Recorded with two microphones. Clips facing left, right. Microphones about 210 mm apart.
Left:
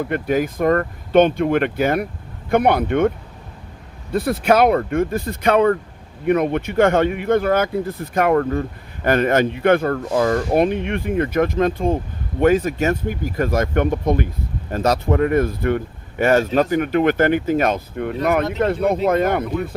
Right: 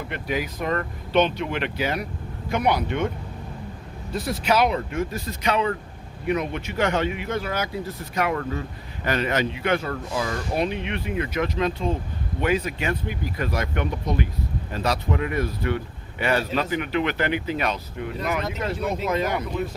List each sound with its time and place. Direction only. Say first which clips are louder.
0.0 s speech: left 8 dB; 45° left (ahead or behind)
4.1 s speech: left 7 dB; 55° left (ahead or behind)